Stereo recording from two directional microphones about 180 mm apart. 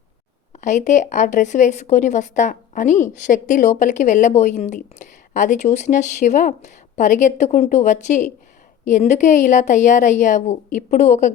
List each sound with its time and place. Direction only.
0.5 s a woman's voice: 40° left (ahead or behind)